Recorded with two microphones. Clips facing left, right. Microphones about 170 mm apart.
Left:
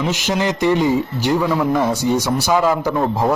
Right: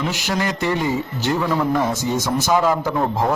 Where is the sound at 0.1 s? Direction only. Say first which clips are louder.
Left 3 dB; 20° left (ahead or behind).